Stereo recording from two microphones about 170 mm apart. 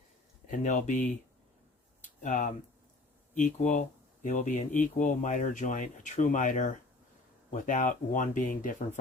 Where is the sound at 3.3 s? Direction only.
45° left (ahead or behind).